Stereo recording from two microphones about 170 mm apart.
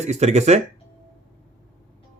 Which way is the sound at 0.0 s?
40° right (ahead or behind).